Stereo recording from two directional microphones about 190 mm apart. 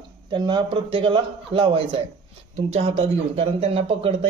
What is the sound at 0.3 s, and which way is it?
A man's voice, 25° right (ahead or behind).